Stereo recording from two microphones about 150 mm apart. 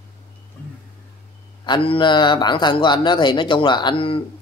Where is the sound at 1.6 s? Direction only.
35° left (ahead or behind).